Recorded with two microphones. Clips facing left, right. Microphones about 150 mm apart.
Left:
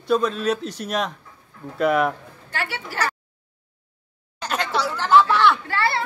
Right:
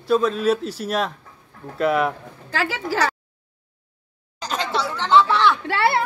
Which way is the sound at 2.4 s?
90° right.